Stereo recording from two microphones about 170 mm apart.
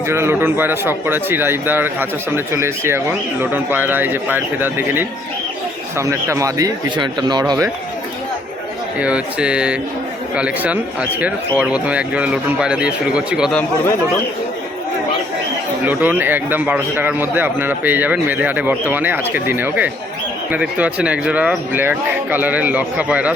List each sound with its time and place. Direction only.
0.1 s speech: 15° right (ahead or behind)
9.0 s speech: 5° right (ahead or behind)
15.8 s speech: 10° right (ahead or behind)